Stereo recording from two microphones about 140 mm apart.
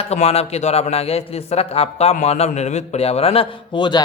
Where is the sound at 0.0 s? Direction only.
50° left (ahead or behind).